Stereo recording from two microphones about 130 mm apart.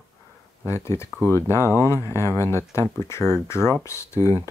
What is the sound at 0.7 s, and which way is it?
Speech, 20° left (ahead or behind).